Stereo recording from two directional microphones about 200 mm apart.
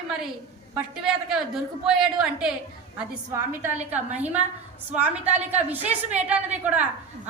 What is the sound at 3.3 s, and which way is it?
A woman's voice, 10° right (ahead or behind).